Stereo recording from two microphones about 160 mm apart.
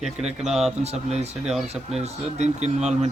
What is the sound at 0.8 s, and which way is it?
Speech, 40° right (ahead or behind).